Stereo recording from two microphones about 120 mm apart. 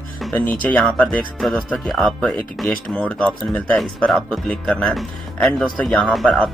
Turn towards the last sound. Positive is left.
turn(degrees=5)  # may be behind; listen again after turning